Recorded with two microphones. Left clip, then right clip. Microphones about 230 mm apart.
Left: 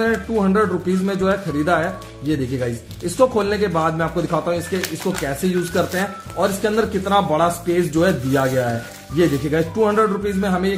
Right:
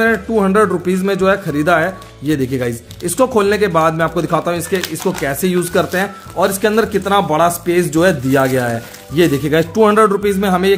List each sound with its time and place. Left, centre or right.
0.0 s speech: right